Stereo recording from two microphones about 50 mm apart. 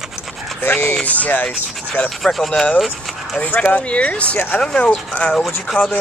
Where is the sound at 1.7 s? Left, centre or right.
Centre.